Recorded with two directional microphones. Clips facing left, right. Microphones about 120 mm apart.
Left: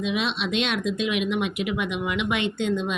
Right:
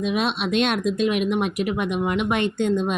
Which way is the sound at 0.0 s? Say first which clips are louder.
Right 3 dB; 45° right (ahead or behind).